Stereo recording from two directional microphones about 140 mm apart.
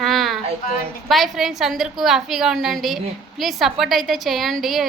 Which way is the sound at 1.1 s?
Centre (ahead or behind).